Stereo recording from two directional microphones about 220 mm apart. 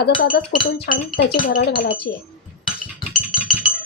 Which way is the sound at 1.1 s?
40° left (ahead or behind).